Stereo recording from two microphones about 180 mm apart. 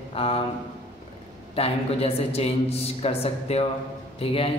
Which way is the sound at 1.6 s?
35° left (ahead or behind).